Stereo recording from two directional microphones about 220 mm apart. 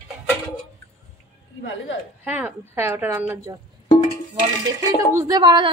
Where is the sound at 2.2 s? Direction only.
5° right (ahead or behind).